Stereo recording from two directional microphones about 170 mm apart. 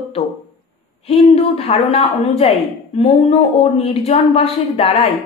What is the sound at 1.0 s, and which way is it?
A woman's voice, 35° left (ahead or behind).